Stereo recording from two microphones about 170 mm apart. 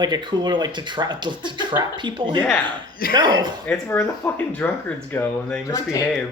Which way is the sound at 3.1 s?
25° right (ahead or behind).